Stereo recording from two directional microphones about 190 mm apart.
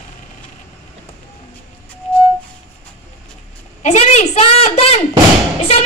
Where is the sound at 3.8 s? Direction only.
35° left (ahead or behind).